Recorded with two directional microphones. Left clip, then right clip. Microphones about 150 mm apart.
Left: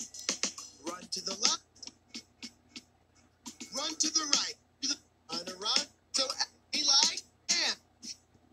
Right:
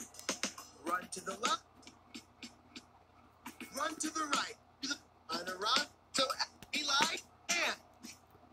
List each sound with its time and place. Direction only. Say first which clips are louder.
0.0 s music: left 5 dB; 45° left (ahead or behind)
3.4 s hiccup: left 2 dB; 45° left (ahead or behind)
7.7 s throat clearing: left 4 dB; 50° left (ahead or behind)